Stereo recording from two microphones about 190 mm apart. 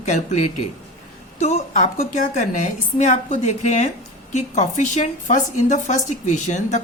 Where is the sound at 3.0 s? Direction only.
40° left (ahead or behind).